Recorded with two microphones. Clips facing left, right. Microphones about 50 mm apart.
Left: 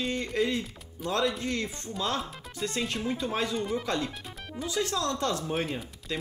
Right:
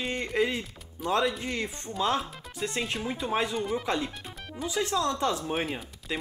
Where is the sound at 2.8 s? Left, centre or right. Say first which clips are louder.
Left 2 dB; centre.